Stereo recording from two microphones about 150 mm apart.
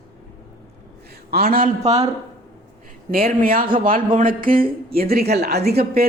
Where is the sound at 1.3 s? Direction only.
85° right.